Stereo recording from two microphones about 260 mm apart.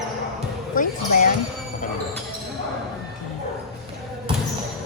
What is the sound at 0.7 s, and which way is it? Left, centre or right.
Speech, left.